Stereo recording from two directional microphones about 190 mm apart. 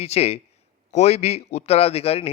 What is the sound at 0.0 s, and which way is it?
A man's voice, 35° left (ahead or behind).